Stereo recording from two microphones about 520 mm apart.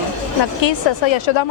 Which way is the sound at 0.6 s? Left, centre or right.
Left.